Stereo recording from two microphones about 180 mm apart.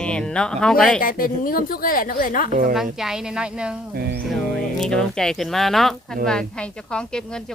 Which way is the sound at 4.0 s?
60° right (ahead or behind).